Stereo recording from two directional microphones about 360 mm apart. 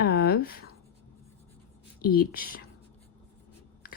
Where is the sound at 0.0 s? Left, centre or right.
Left.